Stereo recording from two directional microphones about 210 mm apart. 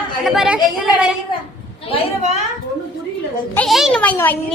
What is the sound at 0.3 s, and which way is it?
Speech, 5° right (ahead or behind).